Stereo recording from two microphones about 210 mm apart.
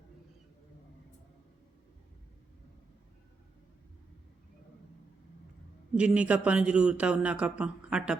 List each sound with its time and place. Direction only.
5.9 s a man's voice: 5° right (ahead or behind)